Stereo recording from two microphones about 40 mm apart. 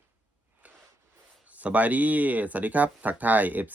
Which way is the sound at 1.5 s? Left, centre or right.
Right.